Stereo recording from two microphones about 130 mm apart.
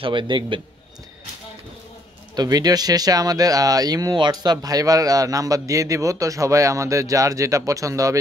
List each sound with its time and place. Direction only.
0.0 s a man's voice: 40° right (ahead or behind)
2.3 s speech: 30° right (ahead or behind)